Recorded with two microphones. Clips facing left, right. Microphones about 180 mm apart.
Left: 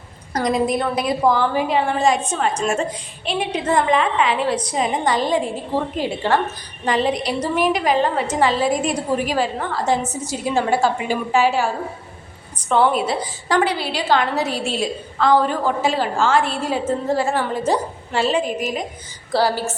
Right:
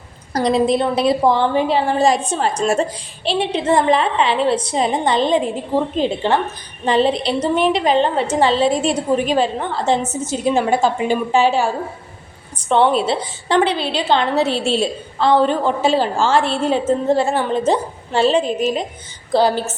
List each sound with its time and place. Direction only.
0.3 s a woman's voice: 30° right (ahead or behind)
12.6 s a woman's voice: 25° right (ahead or behind)